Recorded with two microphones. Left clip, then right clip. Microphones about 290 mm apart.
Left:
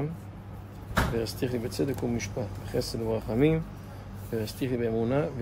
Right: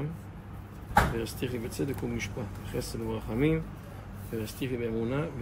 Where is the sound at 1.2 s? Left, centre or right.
Left.